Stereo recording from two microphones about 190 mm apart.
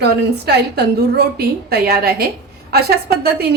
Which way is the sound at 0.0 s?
60° right (ahead or behind).